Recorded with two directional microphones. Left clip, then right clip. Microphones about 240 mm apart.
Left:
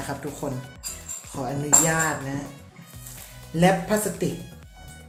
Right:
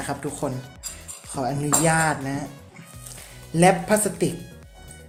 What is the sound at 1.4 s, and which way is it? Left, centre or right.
Speech, right.